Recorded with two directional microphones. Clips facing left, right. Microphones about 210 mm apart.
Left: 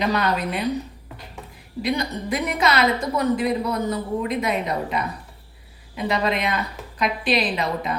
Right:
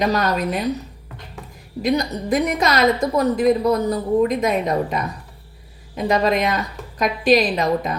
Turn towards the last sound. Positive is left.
turn(degrees=-40)  # may be behind; listen again after turning